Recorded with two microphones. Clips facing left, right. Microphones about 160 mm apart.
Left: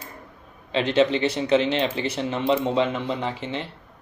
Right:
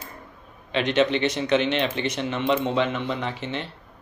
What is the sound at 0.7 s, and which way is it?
Speech, 30° left (ahead or behind).